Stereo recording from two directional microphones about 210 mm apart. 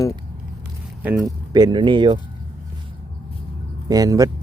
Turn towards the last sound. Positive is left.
turn(degrees=-15)  # may be behind; listen again after turning